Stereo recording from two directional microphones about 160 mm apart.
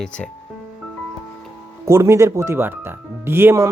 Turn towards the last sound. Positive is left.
turn(degrees=-15)  # may be behind; listen again after turning